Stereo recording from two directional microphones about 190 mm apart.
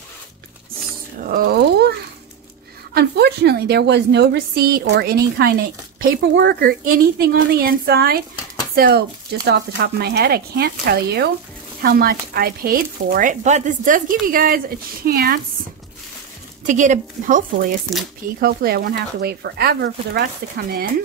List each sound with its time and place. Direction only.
1.2 s a sound: 50° right (ahead or behind)
2.9 s a woman's voice: 55° right (ahead or behind)
16.6 s a woman's voice: 40° right (ahead or behind)